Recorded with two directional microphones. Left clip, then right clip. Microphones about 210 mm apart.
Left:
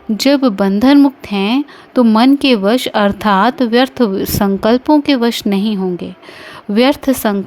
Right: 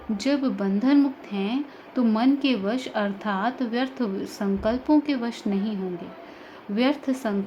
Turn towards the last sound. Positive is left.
turn(degrees=45)  # may be behind; listen again after turning